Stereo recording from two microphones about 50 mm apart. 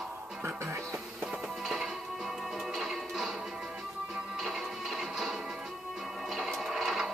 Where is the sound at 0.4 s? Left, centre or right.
Right.